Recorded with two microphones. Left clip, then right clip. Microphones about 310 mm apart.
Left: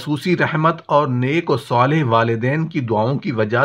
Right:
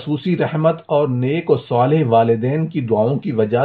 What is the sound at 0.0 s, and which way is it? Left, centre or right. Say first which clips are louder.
Speech: left 1 dB; left.